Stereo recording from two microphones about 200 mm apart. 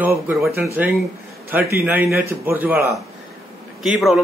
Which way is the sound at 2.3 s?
10° right (ahead or behind).